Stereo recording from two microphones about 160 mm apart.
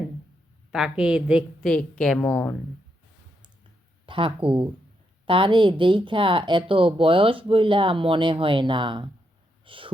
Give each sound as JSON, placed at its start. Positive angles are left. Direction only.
{"t": 0.7, "sound": "a woman's voice", "side_deg": -5}
{"t": 4.0, "sound": "speech", "side_deg": -30}